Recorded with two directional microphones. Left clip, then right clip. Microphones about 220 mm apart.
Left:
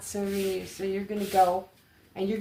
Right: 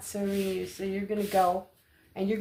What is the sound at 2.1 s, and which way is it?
Speech, 35° right (ahead or behind).